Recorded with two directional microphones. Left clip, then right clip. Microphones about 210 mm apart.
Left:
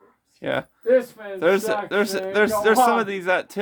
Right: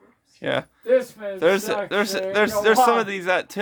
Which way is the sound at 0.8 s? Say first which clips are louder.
Left 1 dB; 30° left (ahead or behind).